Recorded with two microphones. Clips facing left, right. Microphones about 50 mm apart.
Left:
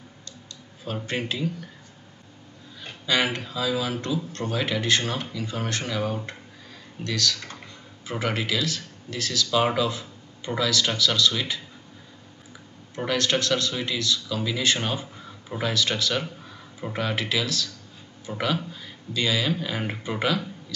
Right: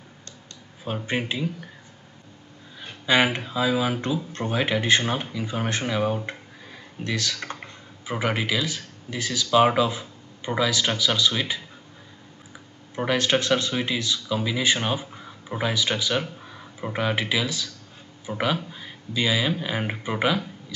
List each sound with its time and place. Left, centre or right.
1.0 s speech: centre
2.8 s speech: right
7.3 s typing: right
8.0 s speech: centre
12.9 s speech: centre